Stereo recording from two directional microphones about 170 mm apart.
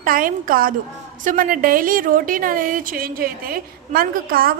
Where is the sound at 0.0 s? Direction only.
55° right (ahead or behind).